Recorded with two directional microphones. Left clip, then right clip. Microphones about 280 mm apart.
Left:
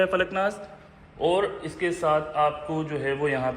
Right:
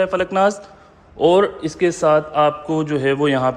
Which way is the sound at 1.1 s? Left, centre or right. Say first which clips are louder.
Right 9 dB; right.